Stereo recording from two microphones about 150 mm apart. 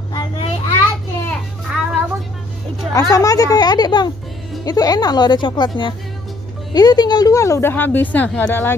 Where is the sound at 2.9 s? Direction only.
20° left (ahead or behind).